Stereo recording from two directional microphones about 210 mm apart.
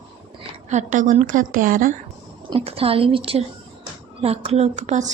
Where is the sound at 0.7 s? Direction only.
35° right (ahead or behind).